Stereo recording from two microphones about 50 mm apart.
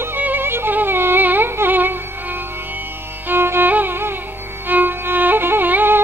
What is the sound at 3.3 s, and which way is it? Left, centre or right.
Music, right.